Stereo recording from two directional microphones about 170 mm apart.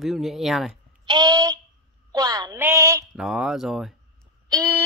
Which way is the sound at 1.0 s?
25° right (ahead or behind).